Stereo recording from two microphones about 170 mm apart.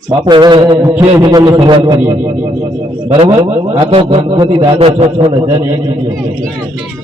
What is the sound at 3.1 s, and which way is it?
A man's voice, 35° right (ahead or behind).